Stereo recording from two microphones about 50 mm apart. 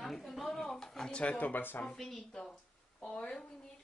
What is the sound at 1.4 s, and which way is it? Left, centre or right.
Speech, left.